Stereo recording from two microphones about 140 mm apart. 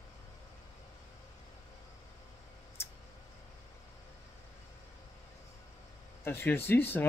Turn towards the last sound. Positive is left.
turn(degrees=15)  # may be behind; listen again after turning